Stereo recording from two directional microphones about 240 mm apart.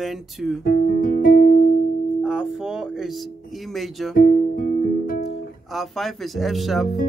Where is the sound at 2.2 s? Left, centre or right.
Centre.